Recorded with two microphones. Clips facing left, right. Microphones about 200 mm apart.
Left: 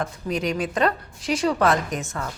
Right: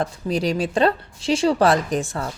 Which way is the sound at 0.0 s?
30° right (ahead or behind).